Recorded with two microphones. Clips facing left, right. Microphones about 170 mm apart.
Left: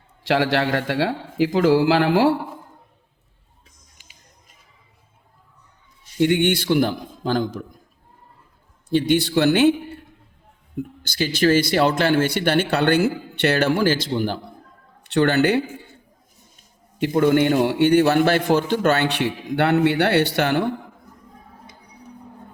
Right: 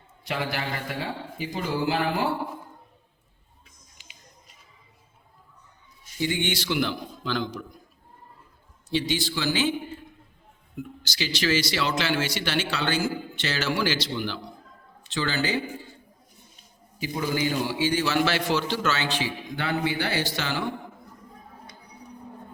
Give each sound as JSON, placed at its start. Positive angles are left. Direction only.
{"t": 0.3, "sound": "a man's voice", "side_deg": 85}
{"t": 3.9, "sound": "a sound", "side_deg": 50}
{"t": 6.1, "sound": "speech", "side_deg": 60}
{"t": 8.9, "sound": "a man's voice", "side_deg": 55}
{"t": 10.8, "sound": "speech", "side_deg": 50}
{"t": 15.0, "sound": "a man's voice", "side_deg": 65}
{"t": 17.0, "sound": "a man's voice", "side_deg": 65}